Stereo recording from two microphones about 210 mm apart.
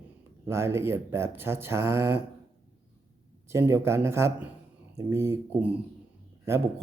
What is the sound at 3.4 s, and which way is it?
A man's voice, 10° right (ahead or behind).